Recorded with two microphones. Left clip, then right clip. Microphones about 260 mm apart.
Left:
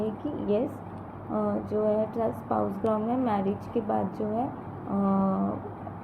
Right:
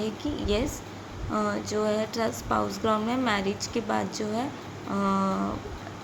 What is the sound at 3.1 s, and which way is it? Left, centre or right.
Speech, centre.